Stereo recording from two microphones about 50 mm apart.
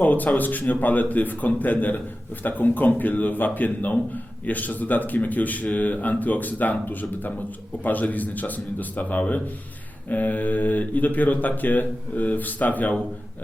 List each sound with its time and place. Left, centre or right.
0.0 s speech: left